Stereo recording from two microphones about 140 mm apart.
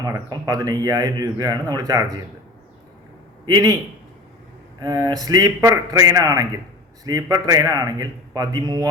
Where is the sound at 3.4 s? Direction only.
25° right (ahead or behind).